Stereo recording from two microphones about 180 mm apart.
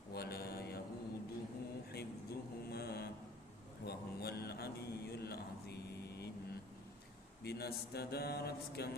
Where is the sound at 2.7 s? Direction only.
65° left (ahead or behind).